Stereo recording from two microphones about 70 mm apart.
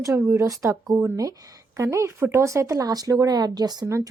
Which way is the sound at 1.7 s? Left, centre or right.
Right.